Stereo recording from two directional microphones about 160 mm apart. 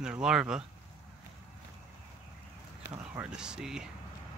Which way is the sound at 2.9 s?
10° right (ahead or behind).